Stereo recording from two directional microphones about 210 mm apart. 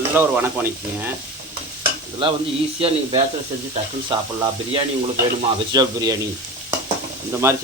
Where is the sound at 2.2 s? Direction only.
25° right (ahead or behind).